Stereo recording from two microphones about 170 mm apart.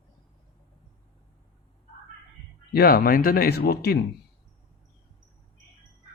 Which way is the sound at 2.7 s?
65° left (ahead or behind).